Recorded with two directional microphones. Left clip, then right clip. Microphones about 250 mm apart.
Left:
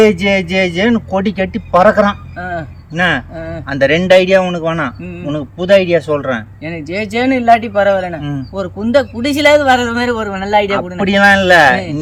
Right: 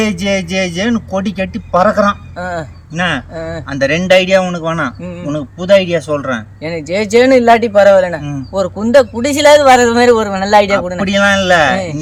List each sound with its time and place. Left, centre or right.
0.0 s a man's voice: centre
2.4 s a man's voice: centre
2.9 s a man's voice: centre
3.3 s a man's voice: centre
3.7 s a man's voice: centre
6.7 s a man's voice: centre
11.0 s a man's voice: centre